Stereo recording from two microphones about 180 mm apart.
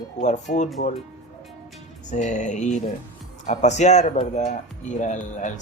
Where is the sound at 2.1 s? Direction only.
40° left (ahead or behind).